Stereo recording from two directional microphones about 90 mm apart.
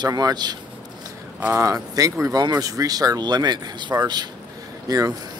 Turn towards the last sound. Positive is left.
turn(degrees=-40)  # may be behind; listen again after turning